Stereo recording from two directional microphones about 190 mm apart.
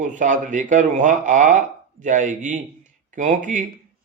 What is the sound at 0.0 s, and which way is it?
Speech, 40° right (ahead or behind).